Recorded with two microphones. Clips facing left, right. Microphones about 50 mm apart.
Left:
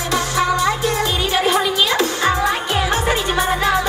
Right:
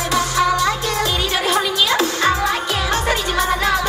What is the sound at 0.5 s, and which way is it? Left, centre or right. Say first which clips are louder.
Music: left 1 dB; centre.